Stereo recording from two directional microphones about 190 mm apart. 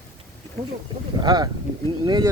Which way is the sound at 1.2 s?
20° right (ahead or behind).